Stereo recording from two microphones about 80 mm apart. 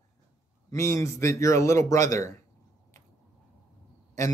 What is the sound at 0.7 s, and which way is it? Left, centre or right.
A man's voice, left.